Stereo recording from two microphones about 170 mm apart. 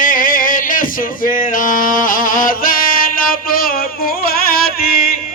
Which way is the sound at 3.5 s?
60° left (ahead or behind).